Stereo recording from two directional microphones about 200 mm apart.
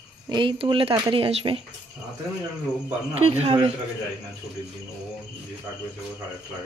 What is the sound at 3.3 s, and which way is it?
Speech, 30° right (ahead or behind).